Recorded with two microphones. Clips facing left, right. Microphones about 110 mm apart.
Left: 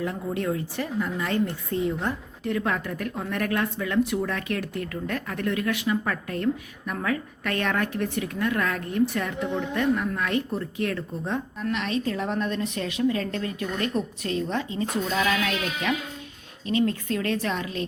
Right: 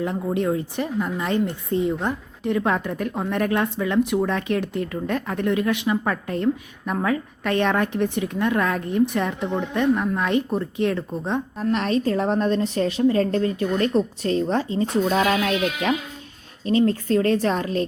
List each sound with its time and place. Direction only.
0.0 s speech: 25° right (ahead or behind)
11.5 s a woman's voice: 40° right (ahead or behind)